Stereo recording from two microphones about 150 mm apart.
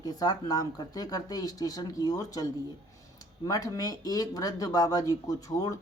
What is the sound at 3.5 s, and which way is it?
Speech, 25° left (ahead or behind).